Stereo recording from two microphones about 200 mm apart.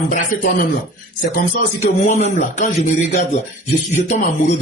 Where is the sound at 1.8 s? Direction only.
35° left (ahead or behind).